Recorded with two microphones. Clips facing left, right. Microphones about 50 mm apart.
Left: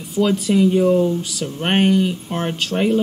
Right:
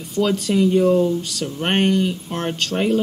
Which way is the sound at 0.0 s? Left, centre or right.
Centre.